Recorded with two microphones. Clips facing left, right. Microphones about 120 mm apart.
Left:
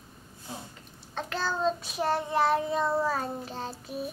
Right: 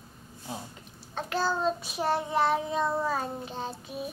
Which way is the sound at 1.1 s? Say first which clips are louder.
Right 2 dB; 5° right (ahead or behind).